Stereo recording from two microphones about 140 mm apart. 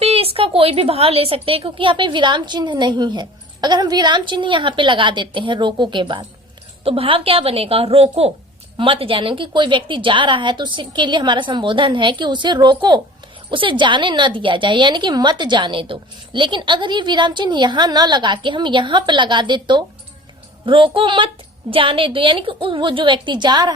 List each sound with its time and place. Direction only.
0.0 s a woman's voice: 45° right (ahead or behind)